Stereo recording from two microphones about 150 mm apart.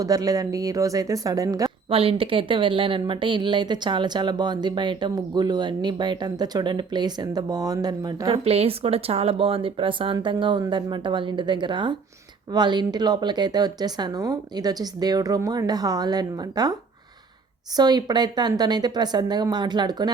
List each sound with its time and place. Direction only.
0.0 s speech: 25° right (ahead or behind)
1.9 s speech: 40° right (ahead or behind)
8.3 s speech: 40° right (ahead or behind); by 16.7 s 25° right (ahead or behind)
17.7 s speech: 30° right (ahead or behind)